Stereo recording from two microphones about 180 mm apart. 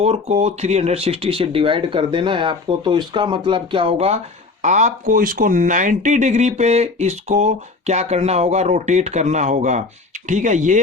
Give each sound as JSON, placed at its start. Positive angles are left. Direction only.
{"t": 0.0, "sound": "speech", "side_deg": -35}